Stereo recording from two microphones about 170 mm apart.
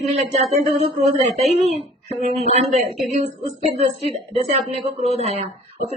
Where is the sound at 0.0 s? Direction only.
40° right (ahead or behind).